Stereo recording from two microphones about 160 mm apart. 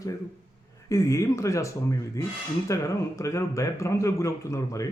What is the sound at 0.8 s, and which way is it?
Speech, 20° left (ahead or behind).